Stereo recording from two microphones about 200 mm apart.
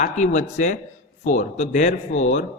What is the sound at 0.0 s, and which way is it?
A man's voice, 35° left (ahead or behind).